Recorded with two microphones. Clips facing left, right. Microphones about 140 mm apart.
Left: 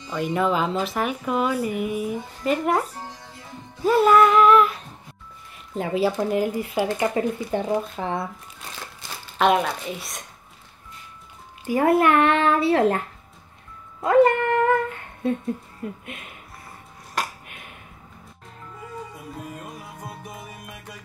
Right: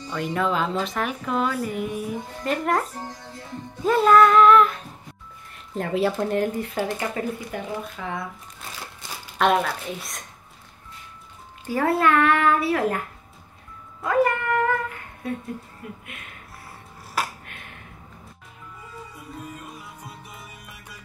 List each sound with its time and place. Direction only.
0.1 s speech: 5° left (ahead or behind)
3.8 s female singing: 5° left (ahead or behind)
5.5 s speech: centre (ahead or behind); by 8.2 s 30° left (ahead or behind)
9.4 s speech: centre (ahead or behind)
11.6 s a child's voice: 20° left (ahead or behind)
14.0 s a sound: 25° left (ahead or behind)
15.8 s speech: 30° left (ahead or behind)
17.2 s finger snapping: 5° right (ahead or behind)
19.6 s music: 50° left (ahead or behind)